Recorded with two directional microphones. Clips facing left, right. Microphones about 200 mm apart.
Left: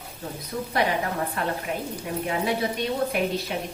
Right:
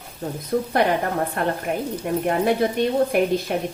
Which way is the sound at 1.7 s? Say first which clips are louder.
Right 6 dB; 55° right (ahead or behind).